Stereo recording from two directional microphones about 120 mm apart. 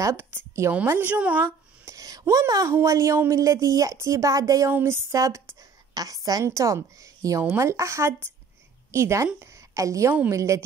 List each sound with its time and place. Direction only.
0.0 s a woman's voice: 20° right (ahead or behind)
1.9 s a woman's voice: 30° right (ahead or behind)